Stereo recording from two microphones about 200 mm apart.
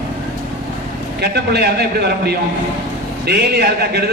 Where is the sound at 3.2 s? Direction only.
55° right (ahead or behind).